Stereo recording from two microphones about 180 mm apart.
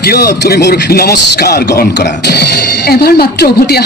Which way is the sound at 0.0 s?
60° left (ahead or behind).